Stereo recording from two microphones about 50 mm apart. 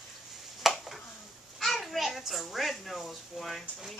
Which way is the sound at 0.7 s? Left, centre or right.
Centre.